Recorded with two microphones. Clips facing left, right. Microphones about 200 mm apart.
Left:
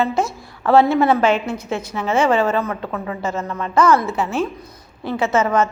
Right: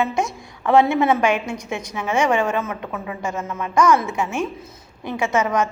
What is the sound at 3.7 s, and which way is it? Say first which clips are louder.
A woman's voice: left 2 dB; 15° right (ahead or behind).